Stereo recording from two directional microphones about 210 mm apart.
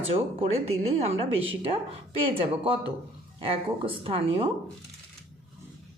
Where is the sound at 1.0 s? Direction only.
30° right (ahead or behind).